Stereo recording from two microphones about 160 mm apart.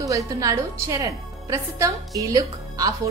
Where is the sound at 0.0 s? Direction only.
20° right (ahead or behind).